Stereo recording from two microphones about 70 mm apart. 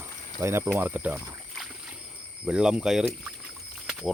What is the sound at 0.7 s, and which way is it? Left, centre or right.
Speech, right.